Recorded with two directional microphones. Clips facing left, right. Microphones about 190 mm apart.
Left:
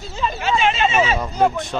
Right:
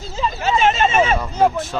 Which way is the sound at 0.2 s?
40° right (ahead or behind).